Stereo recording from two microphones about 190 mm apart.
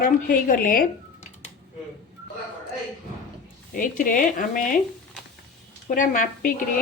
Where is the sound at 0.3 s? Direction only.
45° left (ahead or behind).